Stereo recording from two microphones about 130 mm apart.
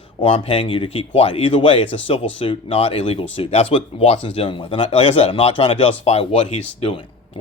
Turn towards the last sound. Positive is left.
turn(degrees=45)  # may be behind; listen again after turning